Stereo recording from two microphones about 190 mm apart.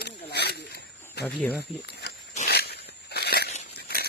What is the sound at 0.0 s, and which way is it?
Snake, 60° left (ahead or behind).